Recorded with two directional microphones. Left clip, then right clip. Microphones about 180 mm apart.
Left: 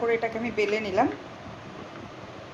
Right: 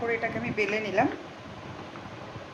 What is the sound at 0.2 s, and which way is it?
Speech, 35° left (ahead or behind).